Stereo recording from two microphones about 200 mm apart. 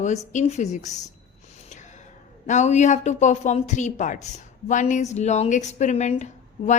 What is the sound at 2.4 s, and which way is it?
A woman's voice, 35° left (ahead or behind).